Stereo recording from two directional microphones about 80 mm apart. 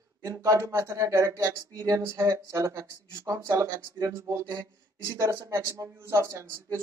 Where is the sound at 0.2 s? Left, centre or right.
Right.